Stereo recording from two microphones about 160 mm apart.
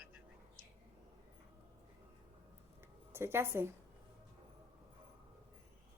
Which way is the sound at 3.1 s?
15° right (ahead or behind).